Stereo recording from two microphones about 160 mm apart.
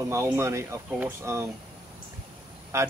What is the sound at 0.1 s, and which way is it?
Speech, 15° right (ahead or behind).